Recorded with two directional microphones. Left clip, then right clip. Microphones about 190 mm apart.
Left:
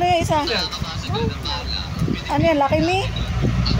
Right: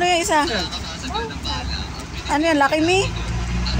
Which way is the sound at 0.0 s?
Centre (ahead or behind).